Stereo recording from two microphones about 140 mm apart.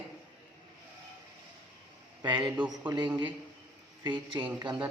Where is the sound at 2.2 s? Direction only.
35° right (ahead or behind).